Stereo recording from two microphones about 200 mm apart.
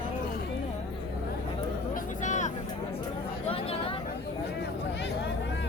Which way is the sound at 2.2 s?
35° left (ahead or behind).